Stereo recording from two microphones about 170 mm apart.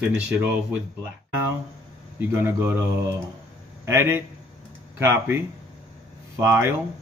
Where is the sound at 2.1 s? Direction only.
15° right (ahead or behind).